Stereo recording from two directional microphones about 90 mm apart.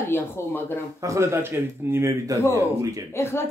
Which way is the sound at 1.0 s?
35° right (ahead or behind).